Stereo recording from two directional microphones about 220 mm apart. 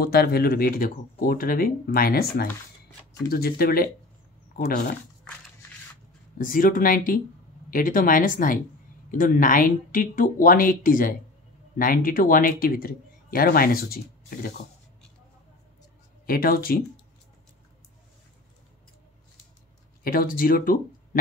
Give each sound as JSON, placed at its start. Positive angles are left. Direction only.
{"t": 0.0, "sound": "speech", "side_deg": 45}
{"t": 6.3, "sound": "speech", "side_deg": 40}
{"t": 16.3, "sound": "speech", "side_deg": 40}
{"t": 20.0, "sound": "speech", "side_deg": 40}